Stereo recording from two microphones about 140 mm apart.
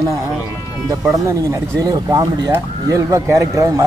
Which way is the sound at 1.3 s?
25° right (ahead or behind).